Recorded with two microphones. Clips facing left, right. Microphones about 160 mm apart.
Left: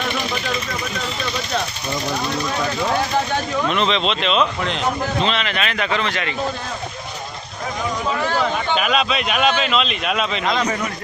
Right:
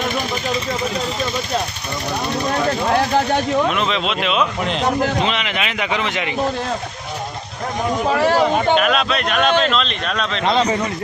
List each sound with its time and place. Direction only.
3.7 s speech: 5° right (ahead or behind)
8.2 s speech: 35° right (ahead or behind)
8.7 s speech: centre (ahead or behind)
10.4 s speech: 30° right (ahead or behind)